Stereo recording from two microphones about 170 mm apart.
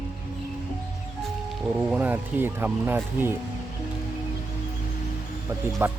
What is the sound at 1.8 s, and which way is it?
Speech, 10° right (ahead or behind).